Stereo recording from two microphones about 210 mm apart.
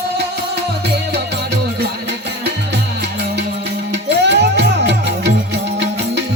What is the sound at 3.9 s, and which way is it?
Music, 55° right (ahead or behind).